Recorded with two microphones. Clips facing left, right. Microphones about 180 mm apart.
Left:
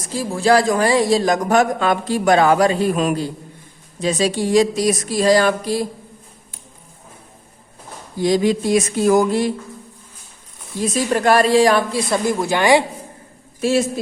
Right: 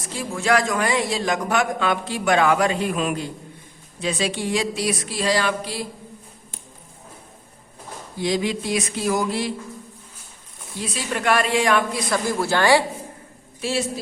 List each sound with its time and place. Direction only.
0.0 s a man's voice: 40° left (ahead or behind)
8.2 s speech: 45° left (ahead or behind)
10.8 s a man's voice: 45° left (ahead or behind); by 12.8 s 15° left (ahead or behind)
13.6 s speech: 45° left (ahead or behind)